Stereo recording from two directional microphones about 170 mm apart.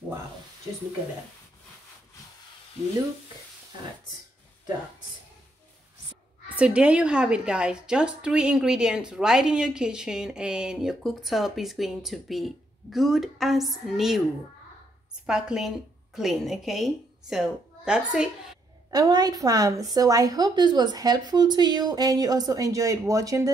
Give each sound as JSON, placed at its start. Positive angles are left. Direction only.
{"t": 6.5, "sound": "a woman's voice", "side_deg": -5}
{"t": 15.2, "sound": "a woman's voice", "side_deg": -5}
{"t": 18.9, "sound": "a woman's voice", "side_deg": -20}